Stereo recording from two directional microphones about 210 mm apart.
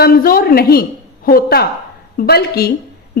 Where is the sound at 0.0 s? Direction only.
45° left (ahead or behind).